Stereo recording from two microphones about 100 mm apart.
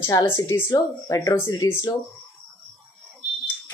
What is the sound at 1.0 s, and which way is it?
Speech, 30° left (ahead or behind).